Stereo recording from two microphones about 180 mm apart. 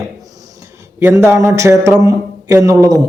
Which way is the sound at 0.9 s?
15° right (ahead or behind).